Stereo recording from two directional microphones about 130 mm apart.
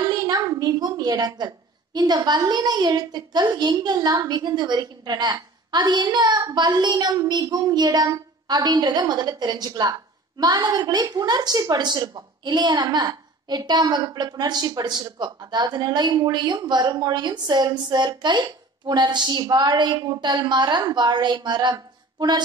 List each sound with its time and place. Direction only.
0.1 s a woman's voice: 30° right (ahead or behind)